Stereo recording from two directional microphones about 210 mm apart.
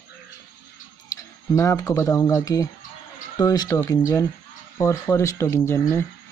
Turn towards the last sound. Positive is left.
turn(degrees=10)  # may be behind; listen again after turning